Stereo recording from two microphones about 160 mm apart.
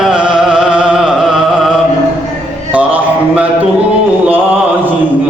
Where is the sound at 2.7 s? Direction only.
10° right (ahead or behind).